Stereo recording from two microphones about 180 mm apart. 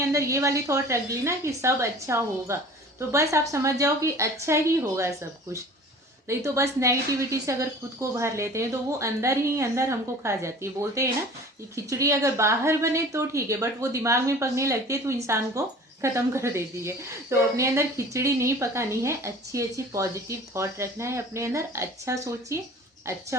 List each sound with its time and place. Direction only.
0.0 s a woman's voice: 15° right (ahead or behind)
6.2 s a woman's voice: 15° right (ahead or behind)